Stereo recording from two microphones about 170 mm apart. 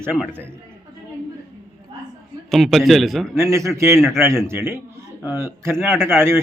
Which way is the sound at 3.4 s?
15° right (ahead or behind).